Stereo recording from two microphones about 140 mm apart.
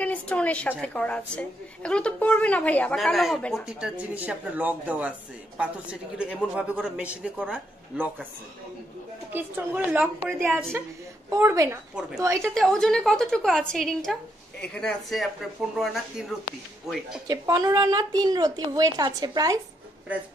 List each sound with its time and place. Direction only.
0.0 s a woman's voice: 10° left (ahead or behind); by 8.1 s 5° right (ahead or behind)
9.3 s a woman's voice: 15° right (ahead or behind)
12.5 s a woman's voice: 5° left (ahead or behind)
17.3 s a woman's voice: 25° right (ahead or behind)